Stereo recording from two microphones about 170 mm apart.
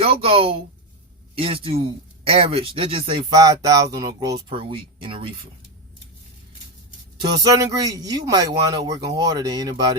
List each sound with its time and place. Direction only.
0.0 s speech: 35° right (ahead or behind)
7.2 s a man's voice: 20° right (ahead or behind)